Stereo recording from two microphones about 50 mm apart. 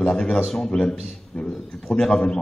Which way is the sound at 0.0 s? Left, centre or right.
Centre.